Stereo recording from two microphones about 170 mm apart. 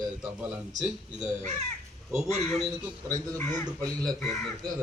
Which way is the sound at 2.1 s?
Centre (ahead or behind).